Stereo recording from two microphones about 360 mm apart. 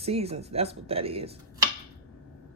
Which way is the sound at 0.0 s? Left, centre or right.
Centre.